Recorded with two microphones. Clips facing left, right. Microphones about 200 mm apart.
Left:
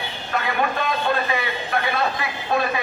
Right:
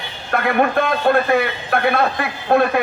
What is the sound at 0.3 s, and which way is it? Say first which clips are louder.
A man's voice: right 6 dB; 55° right (ahead or behind).